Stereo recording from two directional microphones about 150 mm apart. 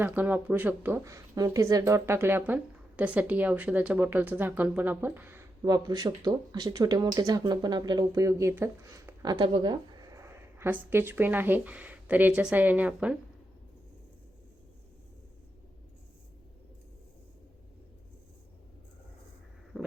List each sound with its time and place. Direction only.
0.0 s speech: 10° right (ahead or behind)
5.6 s speech: 25° right (ahead or behind); by 13.1 s 10° right (ahead or behind)
19.7 s a sound: 5° right (ahead or behind)